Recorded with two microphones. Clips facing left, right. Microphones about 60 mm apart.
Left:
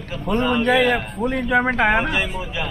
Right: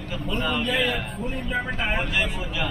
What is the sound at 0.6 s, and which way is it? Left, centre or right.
Speech, left.